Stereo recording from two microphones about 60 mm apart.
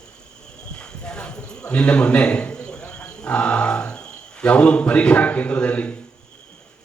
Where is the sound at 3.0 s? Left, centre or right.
Left.